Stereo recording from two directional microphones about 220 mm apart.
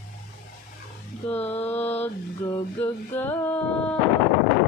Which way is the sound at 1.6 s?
10° left (ahead or behind).